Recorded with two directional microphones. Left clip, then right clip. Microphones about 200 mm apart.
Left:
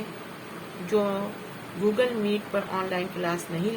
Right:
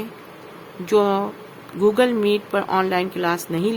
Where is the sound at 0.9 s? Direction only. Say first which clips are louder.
Right 8 dB; 60° right (ahead or behind).